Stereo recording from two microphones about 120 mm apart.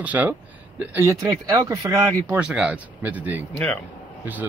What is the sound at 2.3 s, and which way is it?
Speech, 10° right (ahead or behind).